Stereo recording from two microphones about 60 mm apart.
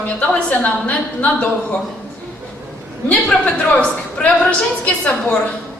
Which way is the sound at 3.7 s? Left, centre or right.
Left.